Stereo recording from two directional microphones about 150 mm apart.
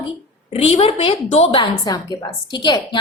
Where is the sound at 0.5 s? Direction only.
40° left (ahead or behind).